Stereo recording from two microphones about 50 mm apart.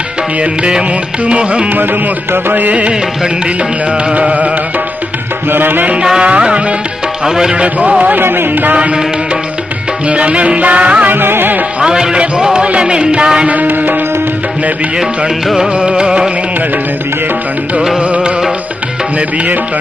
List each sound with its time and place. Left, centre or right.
0.6 s music: centre
1.7 s music: right
5.5 s music: right
6.2 s music: right
7.3 s music: centre
7.6 s music: right
8.2 s music: right
8.7 s music: right
10.1 s music: right
11.1 s music: right
11.8 s music: centre
13.5 s music: right
15.7 s music: centre
17.7 s music: centre